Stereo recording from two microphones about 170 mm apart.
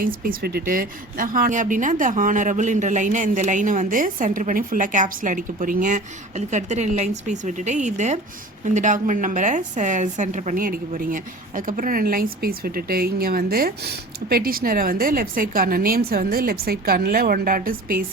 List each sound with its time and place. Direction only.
0.0 s a woman's voice: 55° right (ahead or behind)